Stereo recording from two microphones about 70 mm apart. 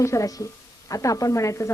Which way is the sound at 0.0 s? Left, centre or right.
Left.